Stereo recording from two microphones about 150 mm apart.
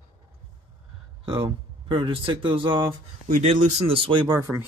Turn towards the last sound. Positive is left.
turn(degrees=-30)  # may be behind; listen again after turning